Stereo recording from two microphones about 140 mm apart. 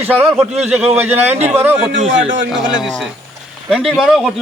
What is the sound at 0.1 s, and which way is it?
Speech, 15° right (ahead or behind).